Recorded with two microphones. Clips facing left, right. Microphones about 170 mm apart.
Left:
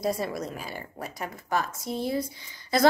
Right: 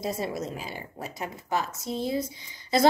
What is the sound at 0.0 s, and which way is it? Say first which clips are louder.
A woman's voice: left 2 dB; 25° right (ahead or behind).